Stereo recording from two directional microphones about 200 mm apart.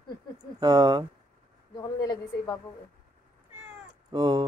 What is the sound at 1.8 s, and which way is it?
Speech, 20° left (ahead or behind).